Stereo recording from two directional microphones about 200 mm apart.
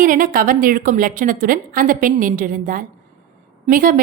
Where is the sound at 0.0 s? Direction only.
45° right (ahead or behind).